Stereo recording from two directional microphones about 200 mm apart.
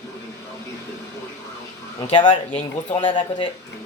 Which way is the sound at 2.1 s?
25° left (ahead or behind).